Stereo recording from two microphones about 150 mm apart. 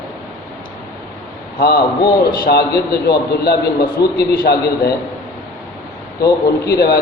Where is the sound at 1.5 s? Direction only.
90° left.